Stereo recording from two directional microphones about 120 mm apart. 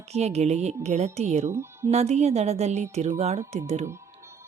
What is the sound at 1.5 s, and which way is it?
Speech, 20° right (ahead or behind).